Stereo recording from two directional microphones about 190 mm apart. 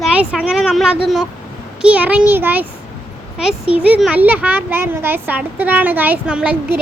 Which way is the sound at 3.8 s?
5° right (ahead or behind).